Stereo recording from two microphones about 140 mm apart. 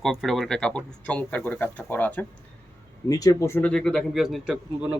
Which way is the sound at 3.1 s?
25° left (ahead or behind).